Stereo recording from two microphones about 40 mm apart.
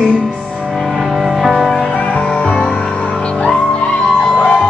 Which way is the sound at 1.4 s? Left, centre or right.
Centre.